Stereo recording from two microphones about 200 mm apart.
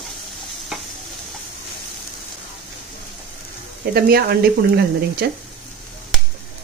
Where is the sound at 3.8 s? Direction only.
50° right (ahead or behind).